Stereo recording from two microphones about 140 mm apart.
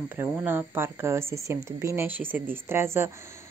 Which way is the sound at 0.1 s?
15° right (ahead or behind).